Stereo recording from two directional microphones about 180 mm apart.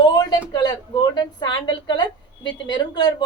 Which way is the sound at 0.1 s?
20° left (ahead or behind).